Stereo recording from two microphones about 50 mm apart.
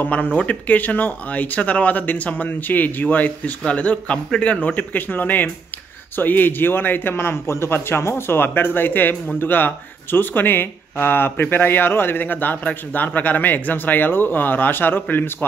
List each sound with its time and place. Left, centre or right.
0.0 s a man's voice: left